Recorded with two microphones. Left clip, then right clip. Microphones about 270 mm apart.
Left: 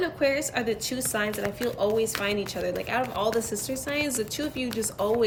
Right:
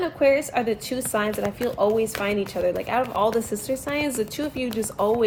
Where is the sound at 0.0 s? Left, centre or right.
Centre.